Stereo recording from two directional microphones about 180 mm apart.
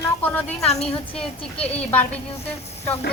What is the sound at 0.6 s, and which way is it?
Speech, 35° left (ahead or behind).